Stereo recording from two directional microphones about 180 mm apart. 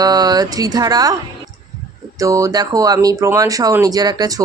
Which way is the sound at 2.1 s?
20° right (ahead or behind).